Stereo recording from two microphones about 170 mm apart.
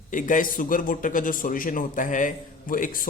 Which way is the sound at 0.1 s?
50° left (ahead or behind).